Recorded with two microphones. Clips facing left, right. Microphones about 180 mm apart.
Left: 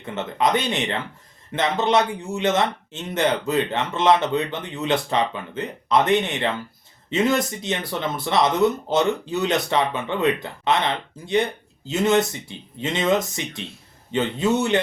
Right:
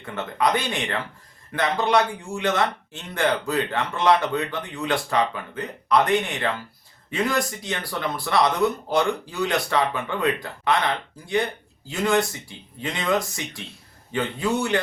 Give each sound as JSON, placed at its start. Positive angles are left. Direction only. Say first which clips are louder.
{"t": 0.0, "sound": "speech", "louder": "left 1 dB", "side_deg": 20}